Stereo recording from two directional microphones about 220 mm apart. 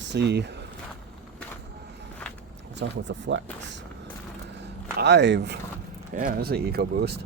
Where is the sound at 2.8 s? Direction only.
55° right (ahead or behind).